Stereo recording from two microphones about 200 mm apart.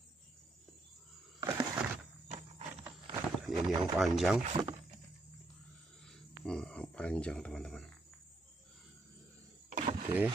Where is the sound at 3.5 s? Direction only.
20° right (ahead or behind).